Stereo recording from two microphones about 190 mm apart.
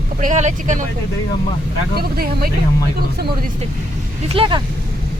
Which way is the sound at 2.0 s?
50° right (ahead or behind).